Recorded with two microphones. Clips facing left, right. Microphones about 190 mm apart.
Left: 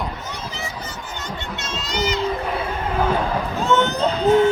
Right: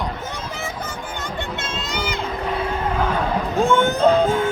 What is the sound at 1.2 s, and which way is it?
Speech, 55° right (ahead or behind).